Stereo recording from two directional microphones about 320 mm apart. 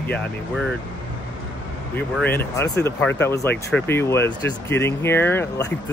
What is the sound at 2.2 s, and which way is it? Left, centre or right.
Speech, centre.